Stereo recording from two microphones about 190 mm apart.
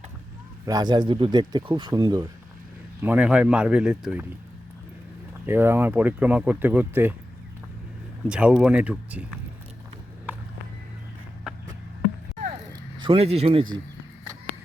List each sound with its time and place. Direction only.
0.6 s speech: 20° right (ahead or behind)
3.0 s speech: 10° right (ahead or behind)
5.5 s speech: 10° right (ahead or behind)
8.3 s speech: 5° right (ahead or behind)
13.0 s speech: 30° right (ahead or behind)